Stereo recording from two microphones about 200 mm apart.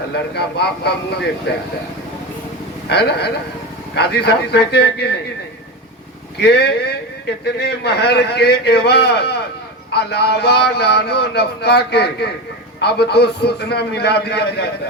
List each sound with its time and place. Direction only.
0.1 s a man's voice: 55° left (ahead or behind)
2.8 s a man's voice: 55° left (ahead or behind)
6.4 s a man's voice: 55° left (ahead or behind)